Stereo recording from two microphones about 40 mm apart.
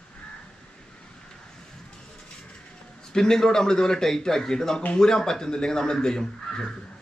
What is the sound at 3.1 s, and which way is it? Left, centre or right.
Speech, centre.